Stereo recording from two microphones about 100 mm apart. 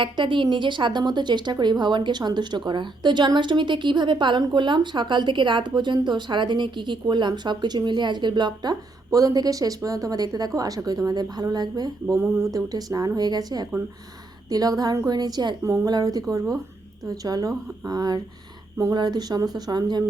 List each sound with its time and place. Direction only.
0.0 s speech: 55° right (ahead or behind)
9.0 s a woman's voice: 35° right (ahead or behind)
15.6 s a woman's voice: 35° right (ahead or behind)